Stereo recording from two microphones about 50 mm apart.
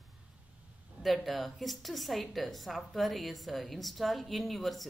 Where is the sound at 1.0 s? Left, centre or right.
Centre.